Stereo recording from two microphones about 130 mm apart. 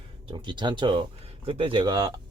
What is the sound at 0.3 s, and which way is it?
Speech, 35° right (ahead or behind).